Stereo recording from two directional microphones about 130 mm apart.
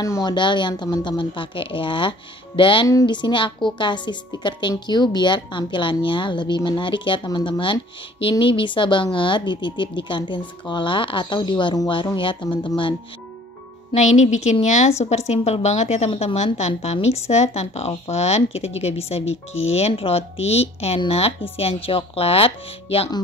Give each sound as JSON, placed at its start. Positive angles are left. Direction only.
{"t": 0.0, "sound": "a woman's voice", "side_deg": 30}
{"t": 2.9, "sound": "a woman's voice", "side_deg": 30}
{"t": 13.9, "sound": "a woman's voice", "side_deg": 60}